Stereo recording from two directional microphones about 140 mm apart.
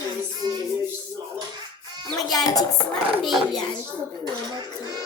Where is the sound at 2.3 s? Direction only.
25° left (ahead or behind).